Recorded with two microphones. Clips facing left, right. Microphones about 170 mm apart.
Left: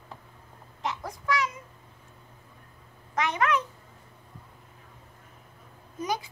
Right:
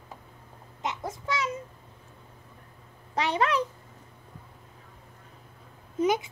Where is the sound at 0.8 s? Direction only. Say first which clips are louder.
Right 1 dB; 20° right (ahead or behind).